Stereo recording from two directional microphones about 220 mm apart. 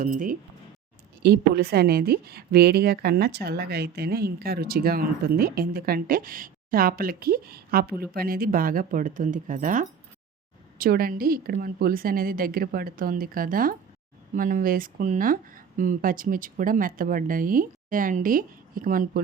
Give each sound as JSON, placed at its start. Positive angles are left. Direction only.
{"t": 0.0, "sound": "a woman's voice", "side_deg": -35}